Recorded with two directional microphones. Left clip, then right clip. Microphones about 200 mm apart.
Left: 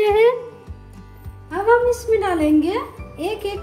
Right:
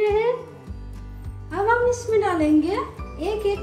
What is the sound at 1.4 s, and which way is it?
A woman's voice, 50° left (ahead or behind).